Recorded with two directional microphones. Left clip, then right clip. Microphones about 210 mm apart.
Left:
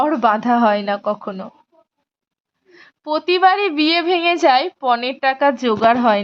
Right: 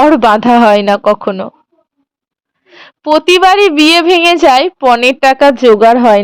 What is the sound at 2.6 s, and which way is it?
A woman's voice, 40° right (ahead or behind).